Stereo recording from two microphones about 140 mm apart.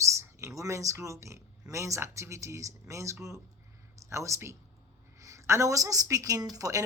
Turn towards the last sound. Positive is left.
turn(degrees=-25)  # may be behind; listen again after turning